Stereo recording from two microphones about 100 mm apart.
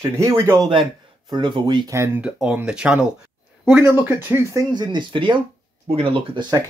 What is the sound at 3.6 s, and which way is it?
Speech, 20° right (ahead or behind).